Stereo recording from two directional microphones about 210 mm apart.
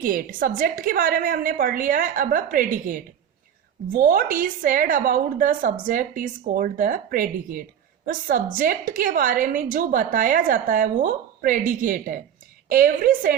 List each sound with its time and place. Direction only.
0.0 s a woman's voice: 40° right (ahead or behind)